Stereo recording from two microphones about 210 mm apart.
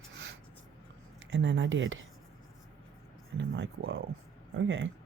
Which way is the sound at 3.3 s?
60° right (ahead or behind).